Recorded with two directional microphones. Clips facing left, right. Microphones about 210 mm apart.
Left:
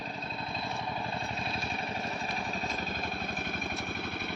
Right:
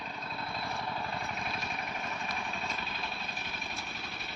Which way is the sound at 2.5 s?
40° left (ahead or behind).